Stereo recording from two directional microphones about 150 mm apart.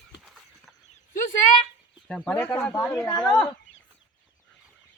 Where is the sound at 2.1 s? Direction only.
10° left (ahead or behind).